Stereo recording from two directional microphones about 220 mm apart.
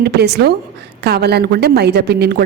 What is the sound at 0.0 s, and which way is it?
A woman's voice, 50° right (ahead or behind).